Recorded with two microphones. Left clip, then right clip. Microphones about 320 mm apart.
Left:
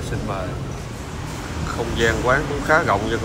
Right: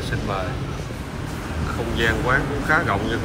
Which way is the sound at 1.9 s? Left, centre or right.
Centre.